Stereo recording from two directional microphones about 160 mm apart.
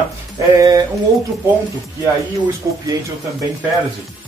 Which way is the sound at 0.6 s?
25° right (ahead or behind).